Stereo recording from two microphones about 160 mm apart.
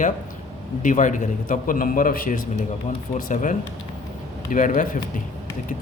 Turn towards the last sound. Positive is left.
turn(degrees=55)  # may be behind; listen again after turning